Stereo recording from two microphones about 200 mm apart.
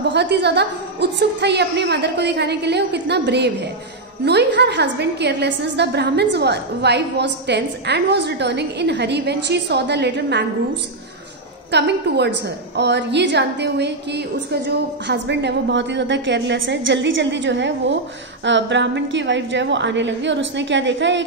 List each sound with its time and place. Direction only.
0.1 s a woman's voice: 55° right (ahead or behind)
11.7 s a woman's voice: 60° right (ahead or behind)